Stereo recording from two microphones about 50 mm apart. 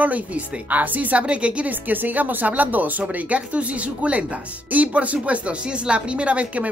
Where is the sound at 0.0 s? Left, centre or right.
Right.